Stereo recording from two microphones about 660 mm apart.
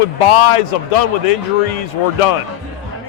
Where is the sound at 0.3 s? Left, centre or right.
Left.